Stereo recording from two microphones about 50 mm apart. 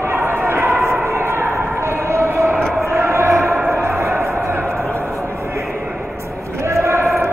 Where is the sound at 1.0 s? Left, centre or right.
Right.